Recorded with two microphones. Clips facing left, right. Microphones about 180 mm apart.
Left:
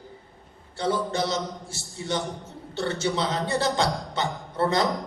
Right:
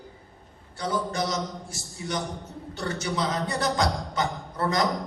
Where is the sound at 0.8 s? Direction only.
30° left (ahead or behind).